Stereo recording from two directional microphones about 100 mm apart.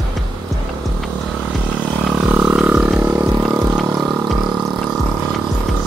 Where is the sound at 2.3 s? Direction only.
10° right (ahead or behind).